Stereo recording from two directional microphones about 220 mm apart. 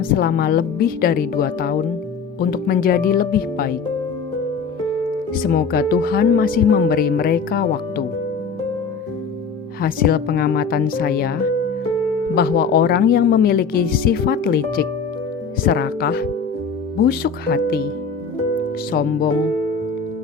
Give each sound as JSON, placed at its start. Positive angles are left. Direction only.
{"t": 0.0, "sound": "speech", "side_deg": 40}
{"t": 5.3, "sound": "speech", "side_deg": 40}
{"t": 9.8, "sound": "speech", "side_deg": 45}
{"t": 12.3, "sound": "speech", "side_deg": 45}
{"t": 18.9, "sound": "speech", "side_deg": 45}